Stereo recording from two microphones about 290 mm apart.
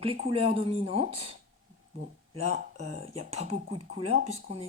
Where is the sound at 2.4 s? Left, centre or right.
Right.